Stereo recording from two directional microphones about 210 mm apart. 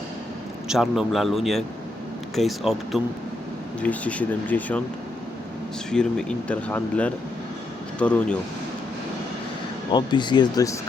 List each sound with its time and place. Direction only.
0.7 s speech: centre (ahead or behind)
5.9 s speech: 5° left (ahead or behind)
9.9 s speech: 20° left (ahead or behind)